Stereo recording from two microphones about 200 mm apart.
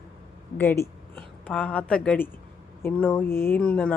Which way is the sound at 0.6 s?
10° left (ahead or behind).